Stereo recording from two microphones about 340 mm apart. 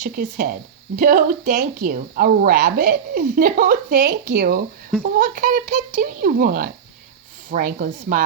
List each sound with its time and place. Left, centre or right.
0.0 s a woman's voice: right